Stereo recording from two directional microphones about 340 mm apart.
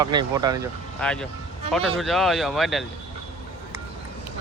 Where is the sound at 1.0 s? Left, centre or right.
Centre.